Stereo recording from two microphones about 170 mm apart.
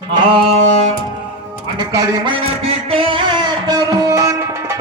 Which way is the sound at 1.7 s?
20° right (ahead or behind).